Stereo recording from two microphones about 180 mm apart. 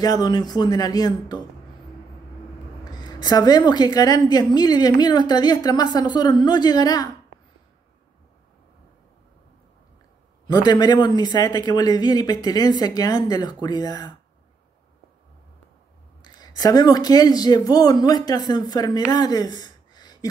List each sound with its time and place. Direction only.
0.0 s a woman's voice: 20° left (ahead or behind)
2.9 s a woman's voice: 20° left (ahead or behind)
10.5 s a woman's voice: 25° left (ahead or behind)
16.2 s speech: 20° left (ahead or behind)